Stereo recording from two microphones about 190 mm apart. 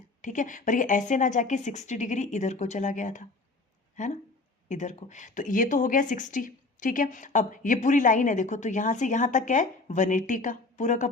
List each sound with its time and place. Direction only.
0.2 s speech: 40° left (ahead or behind)